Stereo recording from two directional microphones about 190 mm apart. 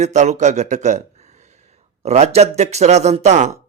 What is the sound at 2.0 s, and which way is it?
Speech, 35° right (ahead or behind).